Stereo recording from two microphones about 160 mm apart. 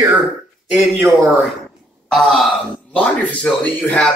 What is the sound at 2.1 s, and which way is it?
Speech, centre (ahead or behind).